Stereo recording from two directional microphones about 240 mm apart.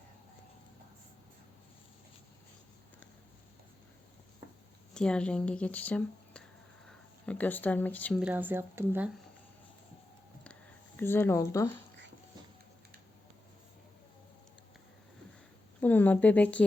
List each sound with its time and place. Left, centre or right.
4.9 s speech: centre
8.2 s speech: centre
11.0 s speech: centre
15.8 s speech: centre